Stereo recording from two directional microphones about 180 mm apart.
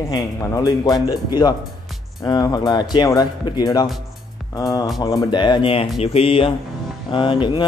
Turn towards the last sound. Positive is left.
turn(degrees=25)  # may be behind; listen again after turning